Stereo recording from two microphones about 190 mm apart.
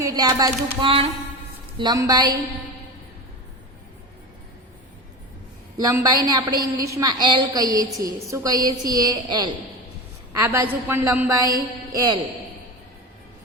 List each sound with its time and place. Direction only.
0.0 s a woman's voice: 20° right (ahead or behind)
5.7 s a woman's voice: 15° right (ahead or behind)